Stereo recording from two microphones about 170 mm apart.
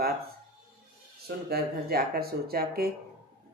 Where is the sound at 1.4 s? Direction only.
65° right (ahead or behind).